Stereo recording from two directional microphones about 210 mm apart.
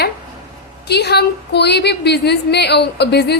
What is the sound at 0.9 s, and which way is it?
A woman's voice, 50° left (ahead or behind).